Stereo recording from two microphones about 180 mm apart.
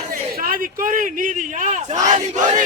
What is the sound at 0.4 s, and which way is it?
A man's voice, 50° right (ahead or behind).